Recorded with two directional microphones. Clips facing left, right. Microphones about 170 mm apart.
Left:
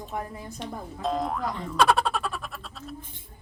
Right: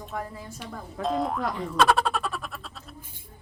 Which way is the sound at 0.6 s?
Centre (ahead or behind).